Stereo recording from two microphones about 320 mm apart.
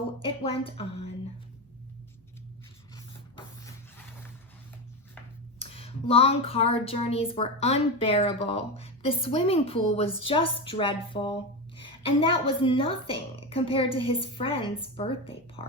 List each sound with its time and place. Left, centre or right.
0.2 s a woman's voice: centre
5.5 s speech: centre